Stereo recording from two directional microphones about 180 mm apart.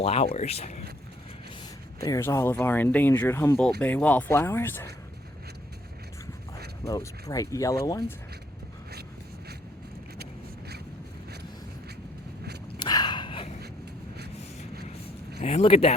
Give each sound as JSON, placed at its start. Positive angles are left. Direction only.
{"t": 0.0, "sound": "speech", "side_deg": 35}
{"t": 2.0, "sound": "speech", "side_deg": 20}
{"t": 6.8, "sound": "speech", "side_deg": 20}
{"t": 12.8, "sound": "a sound", "side_deg": 25}
{"t": 15.4, "sound": "speech", "side_deg": 35}